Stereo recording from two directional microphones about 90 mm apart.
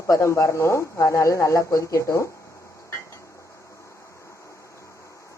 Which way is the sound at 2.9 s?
30° left (ahead or behind).